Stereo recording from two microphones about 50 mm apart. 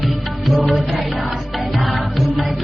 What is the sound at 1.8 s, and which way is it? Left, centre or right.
Music, centre.